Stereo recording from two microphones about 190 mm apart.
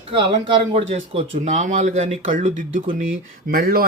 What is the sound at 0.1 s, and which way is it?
Speech, 25° right (ahead or behind).